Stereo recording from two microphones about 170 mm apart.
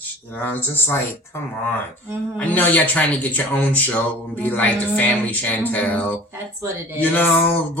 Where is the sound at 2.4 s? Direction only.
10° left (ahead or behind).